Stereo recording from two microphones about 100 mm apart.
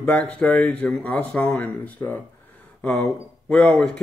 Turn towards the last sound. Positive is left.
turn(degrees=10)  # may be behind; listen again after turning